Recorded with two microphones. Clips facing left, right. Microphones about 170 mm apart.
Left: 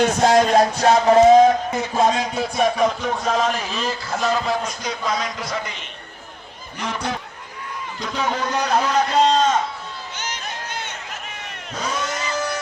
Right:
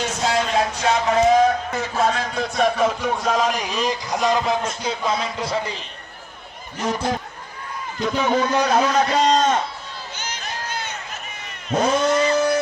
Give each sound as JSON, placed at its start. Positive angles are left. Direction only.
{"t": 0.0, "sound": "music", "side_deg": 50}
{"t": 2.0, "sound": "music", "side_deg": 15}
{"t": 3.4, "sound": "a man's voice", "side_deg": -15}
{"t": 4.8, "sound": "speech", "side_deg": -30}
{"t": 8.0, "sound": "a man's voice", "side_deg": -50}
{"t": 11.7, "sound": "speech", "side_deg": -55}